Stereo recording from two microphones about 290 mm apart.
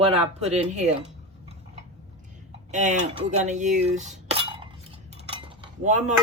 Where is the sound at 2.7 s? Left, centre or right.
Right.